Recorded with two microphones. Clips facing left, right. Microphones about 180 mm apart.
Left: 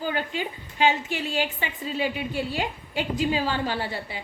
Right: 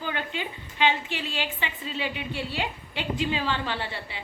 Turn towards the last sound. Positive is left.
turn(degrees=40)  # may be behind; listen again after turning